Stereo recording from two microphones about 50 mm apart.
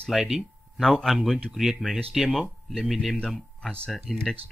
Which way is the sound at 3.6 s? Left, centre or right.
Centre.